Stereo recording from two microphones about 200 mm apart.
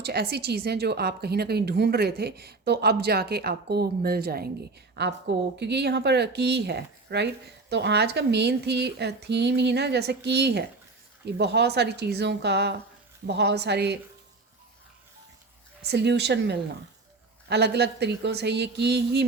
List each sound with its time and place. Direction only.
0.0 s a woman's voice: 55° right (ahead or behind)
15.8 s speech: 55° right (ahead or behind)